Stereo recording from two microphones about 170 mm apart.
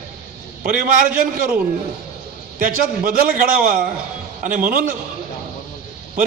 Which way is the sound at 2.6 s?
55° right (ahead or behind).